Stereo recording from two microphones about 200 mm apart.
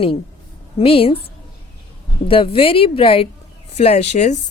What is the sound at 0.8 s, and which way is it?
Speech, 30° left (ahead or behind).